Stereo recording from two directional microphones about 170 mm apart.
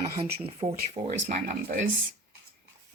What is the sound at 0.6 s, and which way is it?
Speech, 15° right (ahead or behind).